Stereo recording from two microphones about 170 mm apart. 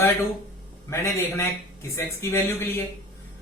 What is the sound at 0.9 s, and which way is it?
A man's voice, 15° left (ahead or behind).